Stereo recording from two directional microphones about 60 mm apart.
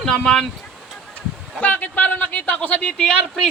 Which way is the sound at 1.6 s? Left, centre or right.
Left.